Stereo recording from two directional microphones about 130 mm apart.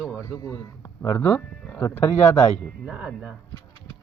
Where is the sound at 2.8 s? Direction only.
10° right (ahead or behind).